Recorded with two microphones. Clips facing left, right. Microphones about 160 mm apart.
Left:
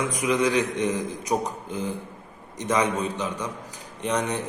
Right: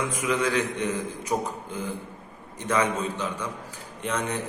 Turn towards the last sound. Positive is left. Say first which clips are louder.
# left 3 dB
turn(degrees=15)  # may be behind; listen again after turning